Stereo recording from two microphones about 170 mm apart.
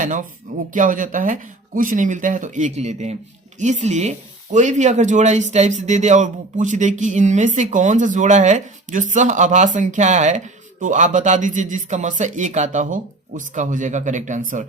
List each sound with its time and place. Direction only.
0.0 s speech: 50° right (ahead or behind)